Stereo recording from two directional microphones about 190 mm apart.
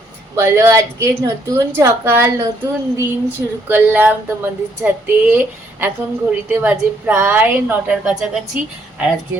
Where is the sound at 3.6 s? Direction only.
10° right (ahead or behind).